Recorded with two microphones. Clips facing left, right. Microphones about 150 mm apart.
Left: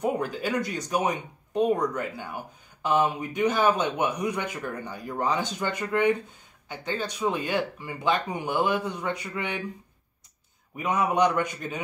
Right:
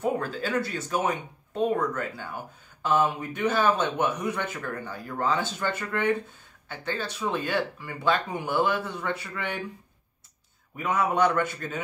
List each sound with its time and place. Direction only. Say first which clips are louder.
0.0 s speech: left 1 dB; 15° left (ahead or behind)
10.8 s speech: left 1 dB; 20° left (ahead or behind)